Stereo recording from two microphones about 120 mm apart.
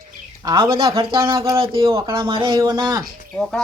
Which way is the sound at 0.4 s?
40° right (ahead or behind).